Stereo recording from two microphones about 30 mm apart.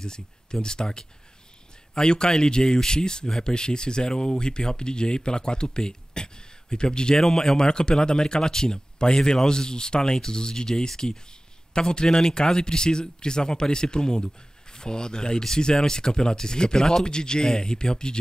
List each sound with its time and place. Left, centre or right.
0.0 s speech: left
7.2 s speech: centre
7.6 s speech: left